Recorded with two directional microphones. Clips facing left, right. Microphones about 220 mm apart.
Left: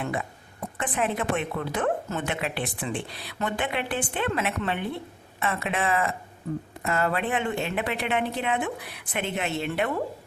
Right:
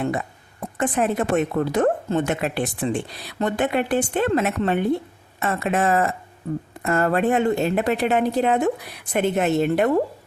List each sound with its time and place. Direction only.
0.0 s a woman's voice: 45° right (ahead or behind)